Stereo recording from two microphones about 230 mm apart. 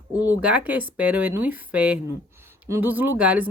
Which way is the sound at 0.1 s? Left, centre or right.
Centre.